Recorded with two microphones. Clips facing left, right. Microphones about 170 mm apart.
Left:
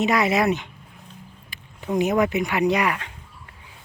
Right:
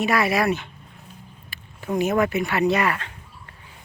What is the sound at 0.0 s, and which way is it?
Speech, 20° left (ahead or behind).